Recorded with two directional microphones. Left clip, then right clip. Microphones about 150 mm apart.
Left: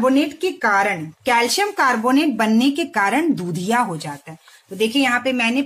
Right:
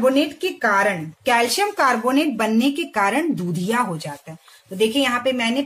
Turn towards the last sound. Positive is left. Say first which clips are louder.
# left 2 dB
turn(degrees=20)  # may be behind; listen again after turning